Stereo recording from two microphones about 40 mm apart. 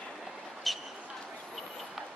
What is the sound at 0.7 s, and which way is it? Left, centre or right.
Basketball bounce, centre.